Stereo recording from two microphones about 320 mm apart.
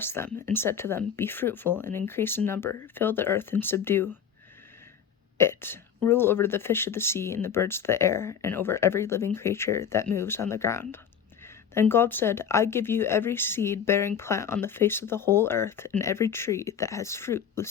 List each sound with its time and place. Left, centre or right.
0.0 s speech: centre
5.4 s speech: centre